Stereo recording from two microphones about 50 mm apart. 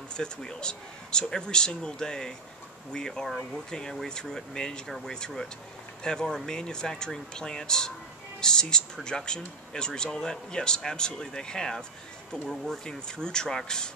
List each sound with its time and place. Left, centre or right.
0.1 s speech: centre